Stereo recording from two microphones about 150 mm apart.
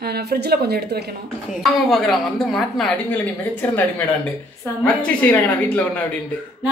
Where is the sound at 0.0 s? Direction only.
90° right.